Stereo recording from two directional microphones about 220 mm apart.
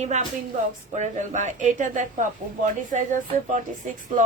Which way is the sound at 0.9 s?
35° right (ahead or behind).